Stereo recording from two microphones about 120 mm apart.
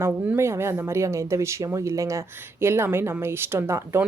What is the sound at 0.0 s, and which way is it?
A woman's voice, 20° right (ahead or behind).